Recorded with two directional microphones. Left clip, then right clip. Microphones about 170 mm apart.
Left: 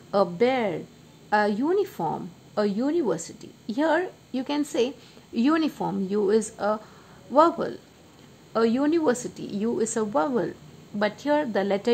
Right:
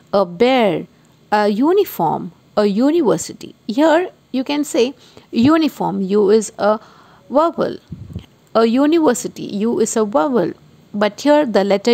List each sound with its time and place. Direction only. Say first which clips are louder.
0.1 s a woman's voice: right 8 dB; 40° right (ahead or behind)